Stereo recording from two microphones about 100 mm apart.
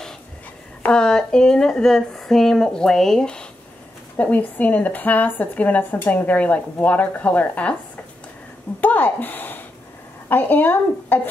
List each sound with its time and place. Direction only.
0.8 s speech: 10° left (ahead or behind)
8.8 s a woman's voice: 20° left (ahead or behind)